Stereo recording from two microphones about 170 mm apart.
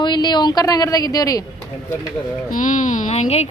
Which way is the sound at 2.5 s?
50° left (ahead or behind).